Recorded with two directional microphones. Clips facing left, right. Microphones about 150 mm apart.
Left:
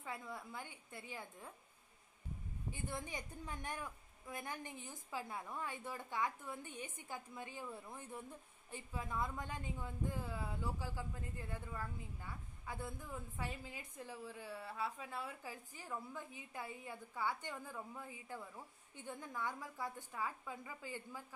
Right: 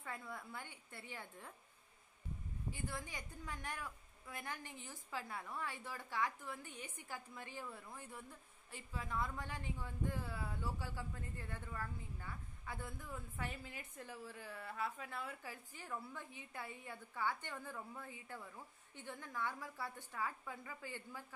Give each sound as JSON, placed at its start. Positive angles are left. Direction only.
{"t": 0.0, "sound": "speech", "side_deg": 15}
{"t": 2.7, "sound": "a woman's voice", "side_deg": 20}